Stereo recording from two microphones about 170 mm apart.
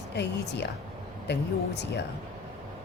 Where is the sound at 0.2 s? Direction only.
85° left.